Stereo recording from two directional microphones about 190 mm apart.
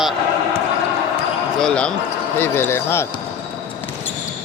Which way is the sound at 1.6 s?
5° left (ahead or behind).